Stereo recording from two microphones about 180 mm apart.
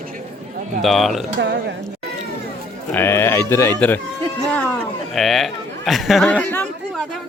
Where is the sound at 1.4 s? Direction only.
75° right (ahead or behind).